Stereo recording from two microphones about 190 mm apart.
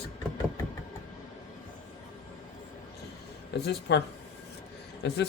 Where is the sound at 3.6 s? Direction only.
60° left (ahead or behind).